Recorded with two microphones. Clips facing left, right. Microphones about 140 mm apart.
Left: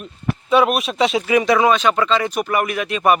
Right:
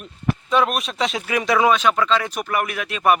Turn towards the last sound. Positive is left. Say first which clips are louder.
# left 2 dB
turn(degrees=0)  # may be behind; listen again after turning